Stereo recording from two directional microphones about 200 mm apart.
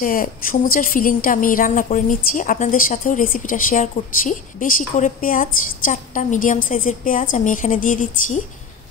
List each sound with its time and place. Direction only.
0.0 s a woman's voice: 45° left (ahead or behind)